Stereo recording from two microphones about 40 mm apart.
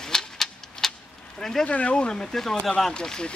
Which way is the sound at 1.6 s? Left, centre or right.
Left.